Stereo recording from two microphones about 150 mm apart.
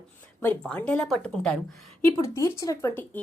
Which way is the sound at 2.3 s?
20° left (ahead or behind).